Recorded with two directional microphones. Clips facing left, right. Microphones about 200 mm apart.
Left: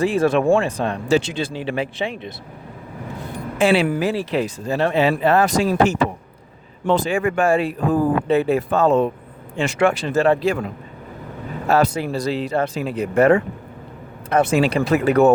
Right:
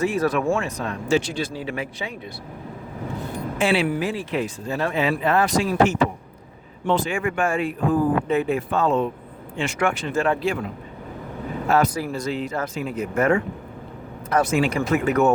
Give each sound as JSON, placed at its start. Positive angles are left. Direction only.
{"t": 0.0, "sound": "speech", "side_deg": 30}
{"t": 3.6, "sound": "speech", "side_deg": 40}
{"t": 11.7, "sound": "speech", "side_deg": 30}